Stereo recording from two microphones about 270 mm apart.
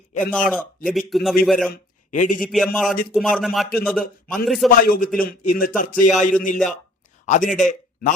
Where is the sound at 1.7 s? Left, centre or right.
Left.